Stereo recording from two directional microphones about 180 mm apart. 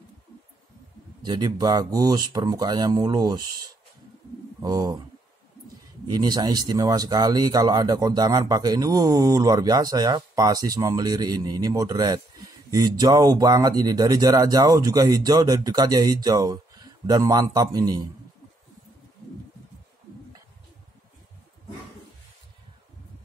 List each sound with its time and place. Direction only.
1.2 s speech: 25° right (ahead or behind)
6.0 s speech: 20° right (ahead or behind)